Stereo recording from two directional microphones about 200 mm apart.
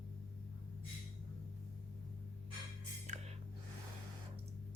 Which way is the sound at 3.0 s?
35° right (ahead or behind).